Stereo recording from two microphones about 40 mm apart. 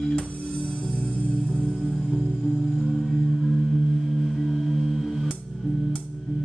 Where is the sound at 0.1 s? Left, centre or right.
Centre.